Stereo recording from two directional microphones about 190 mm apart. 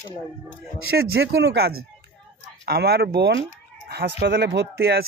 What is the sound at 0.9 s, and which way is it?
Speech, 55° right (ahead or behind).